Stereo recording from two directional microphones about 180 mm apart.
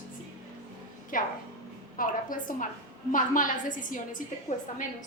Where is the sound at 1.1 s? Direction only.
50° left (ahead or behind).